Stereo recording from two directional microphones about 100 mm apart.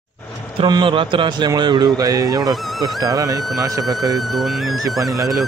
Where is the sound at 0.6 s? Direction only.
50° right (ahead or behind).